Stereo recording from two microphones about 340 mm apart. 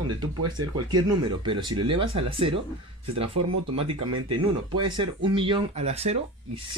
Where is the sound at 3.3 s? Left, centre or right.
Right.